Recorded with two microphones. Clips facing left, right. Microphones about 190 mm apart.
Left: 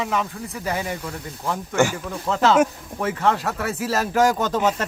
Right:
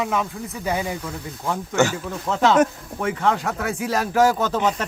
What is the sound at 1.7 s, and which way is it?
Speech, 10° left (ahead or behind).